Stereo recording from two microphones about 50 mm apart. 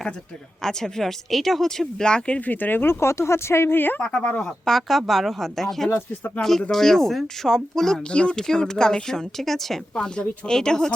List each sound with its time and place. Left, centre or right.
0.6 s speech: centre
2.5 s speech: left
3.8 s speech: left
4.0 s speech: centre
4.9 s speech: centre
8.1 s speech: left; by 9.8 s centre
9.9 s speech: centre